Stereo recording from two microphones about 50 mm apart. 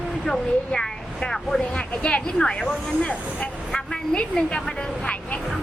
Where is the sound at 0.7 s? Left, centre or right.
Centre.